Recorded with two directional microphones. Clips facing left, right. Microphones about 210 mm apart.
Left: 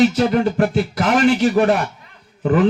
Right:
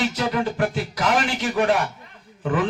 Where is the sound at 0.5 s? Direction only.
35° left (ahead or behind).